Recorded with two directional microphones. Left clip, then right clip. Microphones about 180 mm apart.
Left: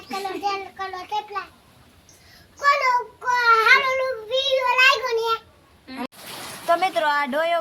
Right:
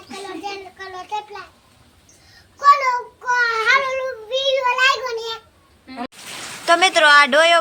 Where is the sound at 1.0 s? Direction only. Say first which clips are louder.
Right 1 dB; centre (ahead or behind).